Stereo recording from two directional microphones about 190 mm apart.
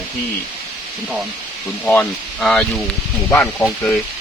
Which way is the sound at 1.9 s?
5° left (ahead or behind).